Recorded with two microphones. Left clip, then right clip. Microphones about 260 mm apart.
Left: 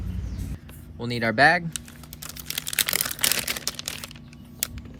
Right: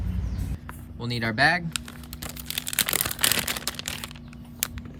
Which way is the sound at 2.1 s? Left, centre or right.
Centre.